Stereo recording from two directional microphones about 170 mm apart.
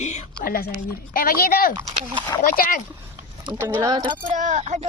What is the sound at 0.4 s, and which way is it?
Speech, 60° left (ahead or behind).